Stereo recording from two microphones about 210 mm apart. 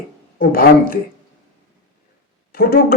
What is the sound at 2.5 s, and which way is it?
Speech, 45° left (ahead or behind).